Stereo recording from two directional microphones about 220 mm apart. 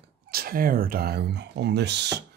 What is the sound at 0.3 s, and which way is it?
Speech, 40° right (ahead or behind).